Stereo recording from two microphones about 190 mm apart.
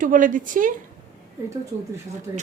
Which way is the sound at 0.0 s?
45° right (ahead or behind).